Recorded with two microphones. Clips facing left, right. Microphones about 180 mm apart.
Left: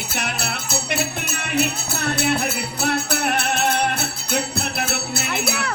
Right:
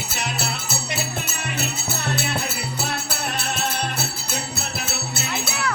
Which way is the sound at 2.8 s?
60° left (ahead or behind).